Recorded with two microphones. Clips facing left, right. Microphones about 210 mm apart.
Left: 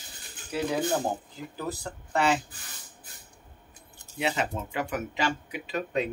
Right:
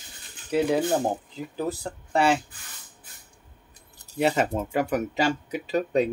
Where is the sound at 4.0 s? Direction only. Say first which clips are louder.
Right 6 dB; 40° right (ahead or behind).